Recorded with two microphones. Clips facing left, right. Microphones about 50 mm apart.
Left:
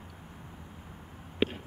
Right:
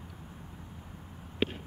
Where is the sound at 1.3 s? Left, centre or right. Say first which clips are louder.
Left 2 dB; centre.